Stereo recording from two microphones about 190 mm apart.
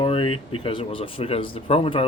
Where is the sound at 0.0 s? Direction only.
30° left (ahead or behind).